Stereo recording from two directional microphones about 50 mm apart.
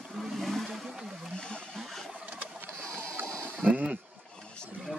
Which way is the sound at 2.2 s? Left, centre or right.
Right.